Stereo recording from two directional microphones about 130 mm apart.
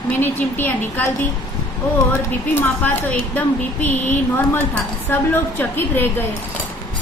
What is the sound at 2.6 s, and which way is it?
A woman's voice, 15° left (ahead or behind).